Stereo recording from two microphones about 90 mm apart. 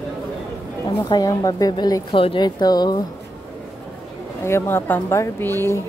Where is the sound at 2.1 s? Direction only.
90° left.